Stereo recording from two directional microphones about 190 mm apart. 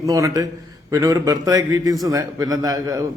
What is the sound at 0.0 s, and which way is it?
A man's voice, 15° right (ahead or behind).